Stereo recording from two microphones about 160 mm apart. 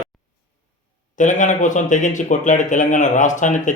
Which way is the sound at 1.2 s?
50° left (ahead or behind).